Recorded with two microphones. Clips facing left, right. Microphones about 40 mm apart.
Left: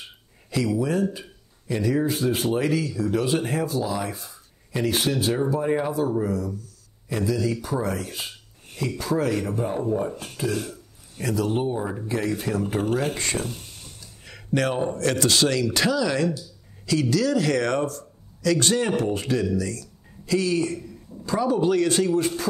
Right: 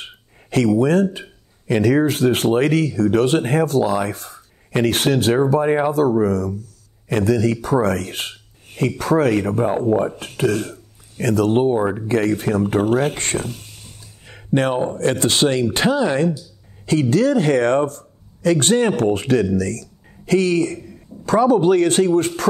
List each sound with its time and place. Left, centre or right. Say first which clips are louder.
0.0 s a sound: right 6 dB; right
0.7 s speech: right 7 dB; right
5.5 s speech: right 7 dB; right
5.9 s speech: right 7 dB; right
14.2 s a man's voice: right 5 dB; right